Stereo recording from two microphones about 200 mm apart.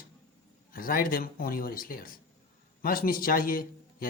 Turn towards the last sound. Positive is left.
turn(degrees=45)  # may be behind; listen again after turning